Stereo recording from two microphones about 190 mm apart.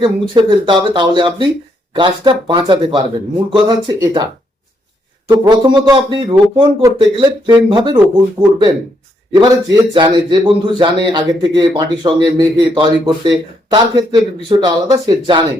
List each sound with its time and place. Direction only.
0.0 s a man's voice: 25° right (ahead or behind)
5.3 s a man's voice: 20° right (ahead or behind)
9.3 s a man's voice: 20° right (ahead or behind)